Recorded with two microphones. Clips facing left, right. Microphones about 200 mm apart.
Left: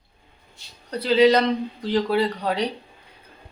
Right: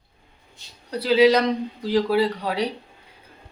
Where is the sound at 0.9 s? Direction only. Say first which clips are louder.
Even; 10° right (ahead or behind).